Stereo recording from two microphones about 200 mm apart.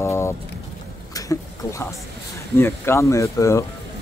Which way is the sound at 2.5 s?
10° left (ahead or behind).